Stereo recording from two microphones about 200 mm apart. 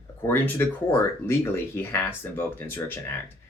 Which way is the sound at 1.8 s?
10° left (ahead or behind).